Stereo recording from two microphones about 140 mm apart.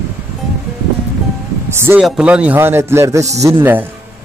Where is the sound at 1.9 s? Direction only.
5° right (ahead or behind).